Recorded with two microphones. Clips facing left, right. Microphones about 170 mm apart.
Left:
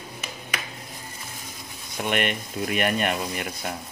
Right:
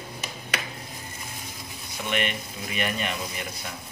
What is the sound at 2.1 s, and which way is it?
Speech, 55° left (ahead or behind).